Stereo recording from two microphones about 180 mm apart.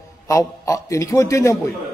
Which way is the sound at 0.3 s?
20° left (ahead or behind).